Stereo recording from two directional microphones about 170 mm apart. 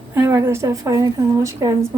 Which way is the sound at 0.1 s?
15° right (ahead or behind).